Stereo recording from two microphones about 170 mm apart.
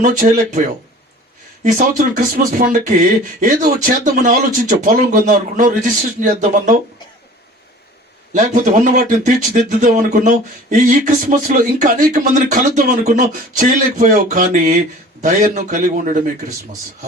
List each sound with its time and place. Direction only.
0.0 s speech: 50° right (ahead or behind)
2.0 s speech: 50° right (ahead or behind)
8.3 s speech: 50° right (ahead or behind)